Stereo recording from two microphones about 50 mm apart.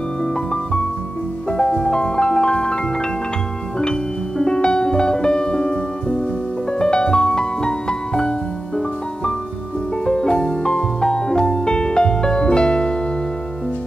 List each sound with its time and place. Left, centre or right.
1.5 s music: centre
3.8 s music: centre